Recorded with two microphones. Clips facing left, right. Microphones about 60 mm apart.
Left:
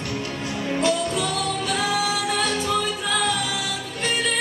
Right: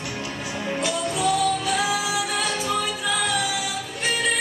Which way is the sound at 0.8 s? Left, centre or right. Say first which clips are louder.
Left 1 dB; centre.